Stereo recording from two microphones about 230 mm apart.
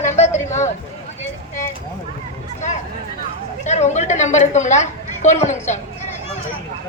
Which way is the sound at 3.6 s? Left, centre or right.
Left.